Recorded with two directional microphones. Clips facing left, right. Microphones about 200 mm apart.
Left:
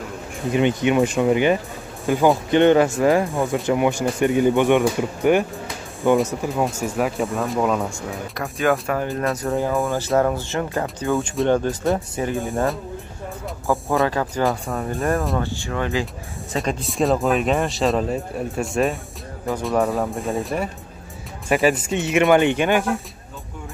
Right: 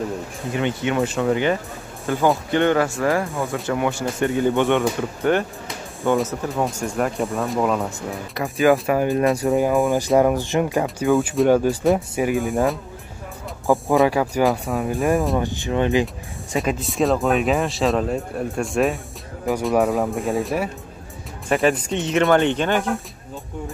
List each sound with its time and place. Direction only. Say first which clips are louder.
0.5 s speech: left 4 dB; 20° left (ahead or behind); by 8.9 s centre (ahead or behind)
8.9 s speech: right 5 dB; 15° right (ahead or behind)
12.2 s speech: right 3 dB; 15° right (ahead or behind)
13.7 s speech: right 3 dB; 15° right (ahead or behind)
14.4 s speech: right 2 dB; centre (ahead or behind)
14.9 s speech: right 2 dB; 15° right (ahead or behind)
16.5 s speech: right 1 dB; centre (ahead or behind)